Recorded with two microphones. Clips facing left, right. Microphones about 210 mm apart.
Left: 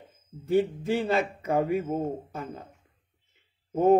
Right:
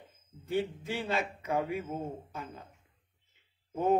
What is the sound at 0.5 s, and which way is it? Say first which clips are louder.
Mantra: left 8 dB; 45° left (ahead or behind).